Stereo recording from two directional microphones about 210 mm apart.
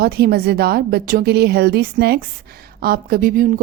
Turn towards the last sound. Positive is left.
turn(degrees=-45)  # may be behind; listen again after turning